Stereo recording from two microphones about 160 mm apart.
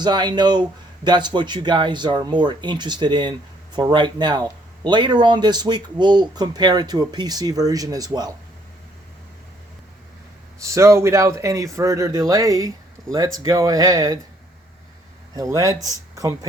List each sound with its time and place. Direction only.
0.0 s speech: 25° right (ahead or behind)
10.6 s speech: 20° right (ahead or behind)
15.4 s speech: 20° right (ahead or behind)